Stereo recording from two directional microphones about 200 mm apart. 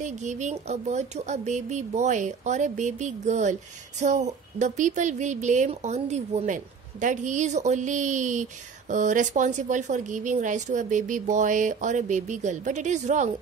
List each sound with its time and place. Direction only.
0.0 s speech: 35° right (ahead or behind)